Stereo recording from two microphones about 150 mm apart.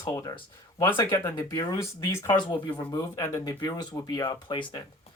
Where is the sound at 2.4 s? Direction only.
30° left (ahead or behind).